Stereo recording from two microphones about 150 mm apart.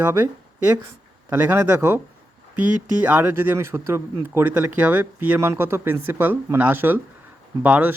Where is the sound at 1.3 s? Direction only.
15° right (ahead or behind).